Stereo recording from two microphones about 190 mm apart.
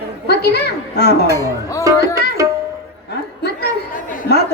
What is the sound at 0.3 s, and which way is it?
Speech, 60° left (ahead or behind).